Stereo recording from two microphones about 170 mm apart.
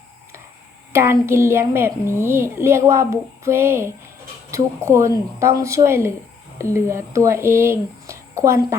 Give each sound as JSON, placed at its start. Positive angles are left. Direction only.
{"t": 0.9, "sound": "a woman's voice", "side_deg": -15}